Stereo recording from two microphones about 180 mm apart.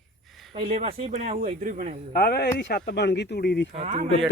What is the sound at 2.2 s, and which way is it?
Speech, 60° left (ahead or behind).